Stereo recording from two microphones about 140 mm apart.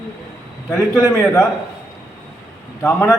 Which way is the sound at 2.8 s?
20° left (ahead or behind).